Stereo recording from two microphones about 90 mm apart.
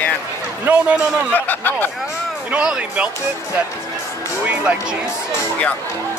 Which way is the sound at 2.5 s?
10° right (ahead or behind).